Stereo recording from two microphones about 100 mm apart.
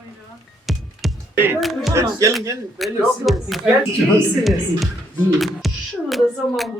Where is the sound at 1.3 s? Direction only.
20° right (ahead or behind).